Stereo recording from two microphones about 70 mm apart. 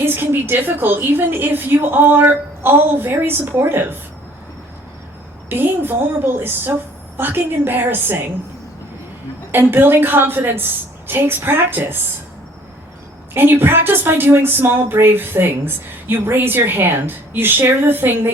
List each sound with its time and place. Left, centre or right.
0.0 s a woman's voice: right
5.5 s a woman's voice: right
9.5 s a woman's voice: right
13.3 s a woman's voice: right